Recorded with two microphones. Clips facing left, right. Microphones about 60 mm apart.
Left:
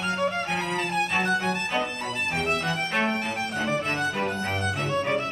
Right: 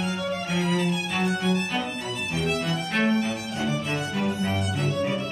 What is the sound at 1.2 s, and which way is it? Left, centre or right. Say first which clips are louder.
Music: even; left.